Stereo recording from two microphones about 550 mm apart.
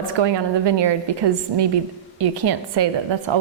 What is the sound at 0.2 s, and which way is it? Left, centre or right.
A woman's voice, right.